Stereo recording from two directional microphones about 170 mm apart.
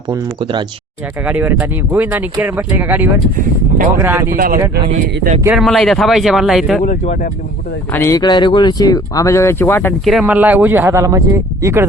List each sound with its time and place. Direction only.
1.2 s speech: 10° right (ahead or behind)
4.4 s speech: 55° right (ahead or behind)
5.5 s speech: centre (ahead or behind)
6.8 s speech: 45° left (ahead or behind)
7.9 s speech: 15° left (ahead or behind)
10.1 s speech: 5° right (ahead or behind)